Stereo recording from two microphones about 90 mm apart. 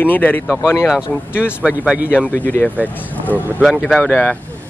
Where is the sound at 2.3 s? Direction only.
20° left (ahead or behind).